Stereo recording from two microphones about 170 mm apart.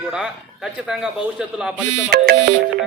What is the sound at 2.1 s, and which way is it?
Music, 60° right (ahead or behind).